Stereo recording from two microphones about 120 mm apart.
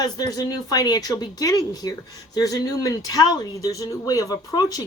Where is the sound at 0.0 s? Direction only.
30° left (ahead or behind).